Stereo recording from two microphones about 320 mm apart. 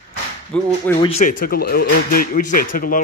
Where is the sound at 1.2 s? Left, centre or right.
Left.